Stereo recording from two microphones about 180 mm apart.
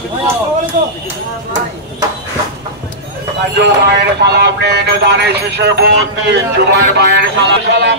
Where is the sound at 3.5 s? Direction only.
70° right (ahead or behind).